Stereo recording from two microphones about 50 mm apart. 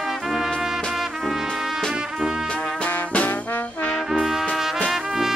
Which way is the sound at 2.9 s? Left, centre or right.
Left.